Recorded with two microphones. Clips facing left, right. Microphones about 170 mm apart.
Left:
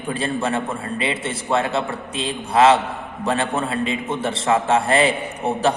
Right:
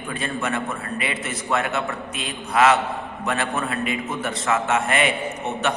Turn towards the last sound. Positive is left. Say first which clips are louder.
# left 4 dB
turn(degrees=30)  # may be behind; listen again after turning